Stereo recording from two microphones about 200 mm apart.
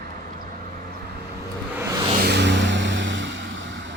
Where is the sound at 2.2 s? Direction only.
55° right (ahead or behind).